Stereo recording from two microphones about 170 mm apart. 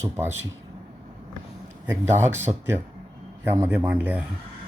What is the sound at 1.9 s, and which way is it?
A man's voice, 15° right (ahead or behind).